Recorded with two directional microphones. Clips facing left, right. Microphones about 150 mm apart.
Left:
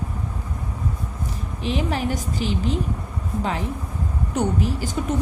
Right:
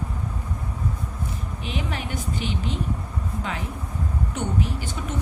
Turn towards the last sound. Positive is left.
turn(degrees=40)  # may be behind; listen again after turning